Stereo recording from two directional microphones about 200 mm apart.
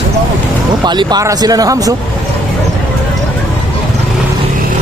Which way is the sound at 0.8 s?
20° right (ahead or behind).